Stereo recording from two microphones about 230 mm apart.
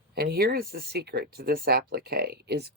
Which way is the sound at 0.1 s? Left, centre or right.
Right.